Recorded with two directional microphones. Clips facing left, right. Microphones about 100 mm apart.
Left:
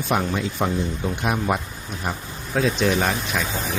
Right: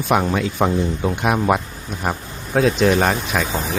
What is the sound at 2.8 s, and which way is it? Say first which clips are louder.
Speech: right 5 dB; 50° right (ahead or behind).